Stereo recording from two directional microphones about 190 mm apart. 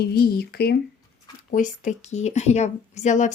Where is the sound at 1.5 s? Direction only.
40° left (ahead or behind).